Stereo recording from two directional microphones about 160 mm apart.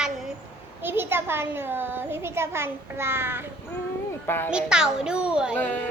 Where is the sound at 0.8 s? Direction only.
15° right (ahead or behind).